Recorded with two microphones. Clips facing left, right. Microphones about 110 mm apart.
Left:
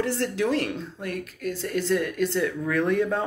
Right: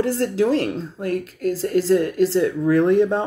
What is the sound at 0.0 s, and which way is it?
Speech, 40° right (ahead or behind).